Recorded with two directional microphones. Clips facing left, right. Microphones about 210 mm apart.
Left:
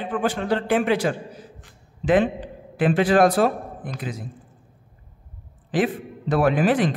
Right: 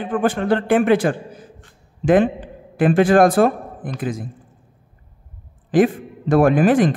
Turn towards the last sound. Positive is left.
turn(degrees=-50)  # may be behind; listen again after turning